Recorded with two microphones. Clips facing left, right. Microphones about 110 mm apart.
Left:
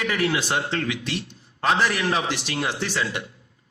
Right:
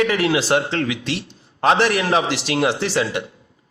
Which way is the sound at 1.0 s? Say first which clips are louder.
Right 4 dB; 90° right.